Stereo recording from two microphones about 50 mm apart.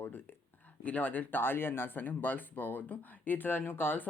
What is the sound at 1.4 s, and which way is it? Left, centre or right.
Speech, left.